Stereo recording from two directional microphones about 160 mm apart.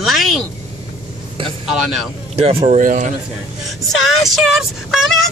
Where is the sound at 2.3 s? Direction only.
35° right (ahead or behind).